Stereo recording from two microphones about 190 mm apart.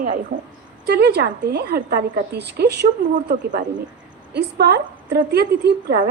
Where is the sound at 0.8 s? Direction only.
60° right (ahead or behind).